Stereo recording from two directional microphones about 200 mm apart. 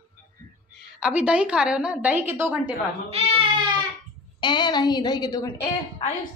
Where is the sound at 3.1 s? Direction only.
30° right (ahead or behind).